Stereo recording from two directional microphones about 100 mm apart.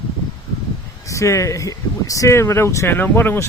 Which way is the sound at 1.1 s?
30° left (ahead or behind).